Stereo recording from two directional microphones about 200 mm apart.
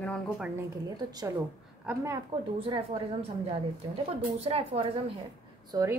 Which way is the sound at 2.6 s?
30° right (ahead or behind).